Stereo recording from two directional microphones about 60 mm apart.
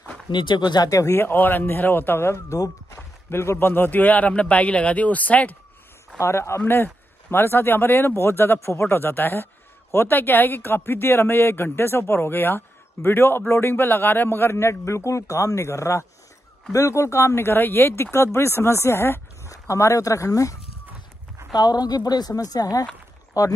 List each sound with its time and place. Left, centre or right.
0.8 s a man's voice: left
1.1 s speech: left
2.5 s speech: left
3.3 s speech: left
6.1 s a man's voice: left
6.6 s a man's voice: left
19.4 s speech: left
21.4 s a sound: right
21.7 s speech: left
23.3 s a man's voice: left